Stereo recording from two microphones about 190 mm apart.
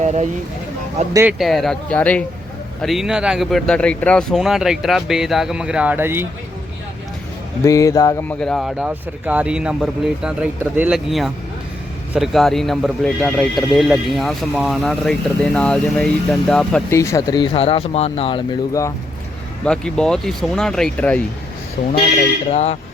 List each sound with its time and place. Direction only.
0.0 s speech: 40° right (ahead or behind)
1.1 s speech: 10° right (ahead or behind)
1.4 s speech: centre (ahead or behind)
7.6 s speech: 15° left (ahead or behind)
16.9 s speech: 15° left (ahead or behind)
19.6 s speech: 5° left (ahead or behind)
21.8 s speech: 40° left (ahead or behind)